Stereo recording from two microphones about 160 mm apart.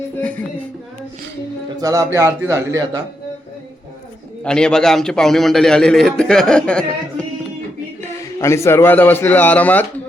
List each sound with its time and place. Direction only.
0.2 s a man's voice: 10° left (ahead or behind)
1.8 s a man's voice: 20° right (ahead or behind)
4.4 s a man's voice: 5° left (ahead or behind)
8.4 s a man's voice: 15° left (ahead or behind)